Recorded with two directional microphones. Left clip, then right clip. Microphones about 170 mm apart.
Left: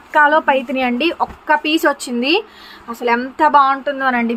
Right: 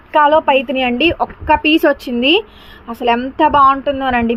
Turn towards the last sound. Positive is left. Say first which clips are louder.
# right 2 dB
turn(degrees=-15)  # may be behind; listen again after turning